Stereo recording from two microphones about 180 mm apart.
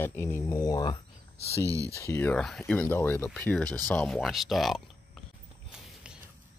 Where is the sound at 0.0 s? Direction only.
10° left (ahead or behind).